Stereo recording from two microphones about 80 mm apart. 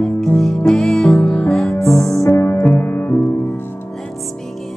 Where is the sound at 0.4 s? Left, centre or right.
Centre.